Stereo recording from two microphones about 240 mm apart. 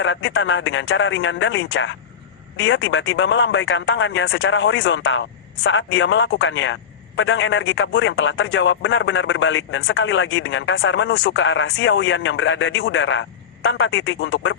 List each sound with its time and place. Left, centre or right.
0.0 s speech: left